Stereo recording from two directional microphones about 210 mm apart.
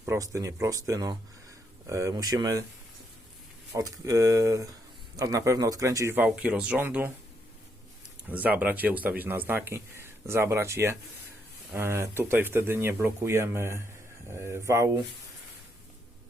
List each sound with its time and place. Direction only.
0.0 s speech: 15° right (ahead or behind)
3.7 s speech: 15° right (ahead or behind)
8.3 s speech: 10° right (ahead or behind)